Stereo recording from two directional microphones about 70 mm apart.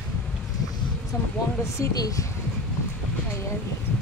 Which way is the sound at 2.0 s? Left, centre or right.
Left.